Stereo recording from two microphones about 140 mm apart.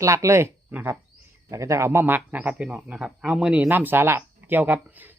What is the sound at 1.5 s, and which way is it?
Speech, 20° right (ahead or behind).